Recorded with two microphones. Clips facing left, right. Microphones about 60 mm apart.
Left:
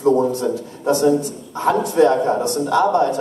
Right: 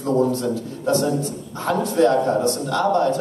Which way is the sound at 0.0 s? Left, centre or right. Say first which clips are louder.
Left 3 dB; centre.